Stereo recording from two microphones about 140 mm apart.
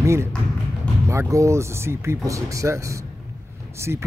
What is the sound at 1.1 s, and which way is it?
Speech, 20° right (ahead or behind).